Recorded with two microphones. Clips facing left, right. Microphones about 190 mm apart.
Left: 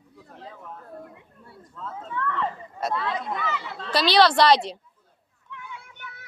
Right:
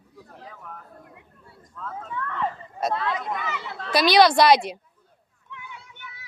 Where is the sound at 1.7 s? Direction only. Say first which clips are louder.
Right 1 dB; 25° left (ahead or behind).